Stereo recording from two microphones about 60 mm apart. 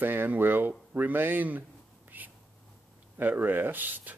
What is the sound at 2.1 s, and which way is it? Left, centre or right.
Whispering, right.